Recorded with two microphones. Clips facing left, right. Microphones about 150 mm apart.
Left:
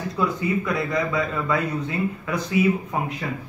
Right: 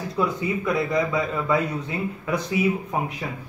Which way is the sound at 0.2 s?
5° right (ahead or behind).